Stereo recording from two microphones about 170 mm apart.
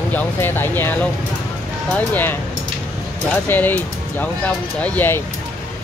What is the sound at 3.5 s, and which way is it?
Speech, 10° left (ahead or behind).